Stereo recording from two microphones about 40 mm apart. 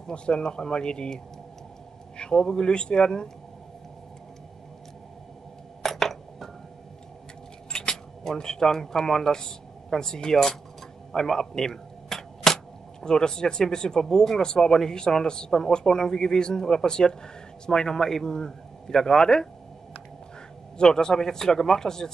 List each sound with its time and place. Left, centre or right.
0.1 s speech: left
5.8 s a sound: centre
7.7 s speech: centre
11.1 s camera: centre
13.0 s speech: centre
20.7 s speech: centre